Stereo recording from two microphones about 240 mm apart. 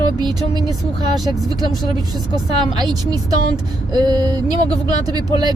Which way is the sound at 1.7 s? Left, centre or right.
Centre.